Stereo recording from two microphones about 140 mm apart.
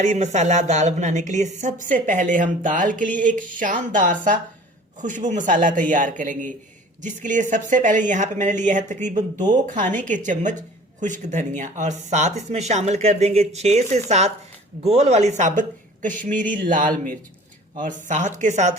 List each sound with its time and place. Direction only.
0.0 s a woman's voice: 60° right (ahead or behind)
18.1 s a woman's voice: 60° right (ahead or behind)